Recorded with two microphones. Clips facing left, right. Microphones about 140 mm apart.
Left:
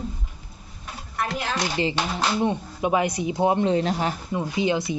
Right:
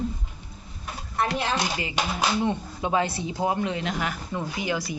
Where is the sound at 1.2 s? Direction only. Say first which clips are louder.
Right 2 dB; 25° right (ahead or behind).